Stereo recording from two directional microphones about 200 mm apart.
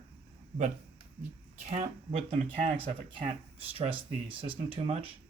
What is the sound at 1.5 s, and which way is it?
Speech, 35° right (ahead or behind).